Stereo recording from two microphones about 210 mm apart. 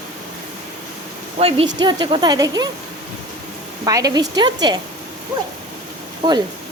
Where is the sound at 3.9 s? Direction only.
15° right (ahead or behind).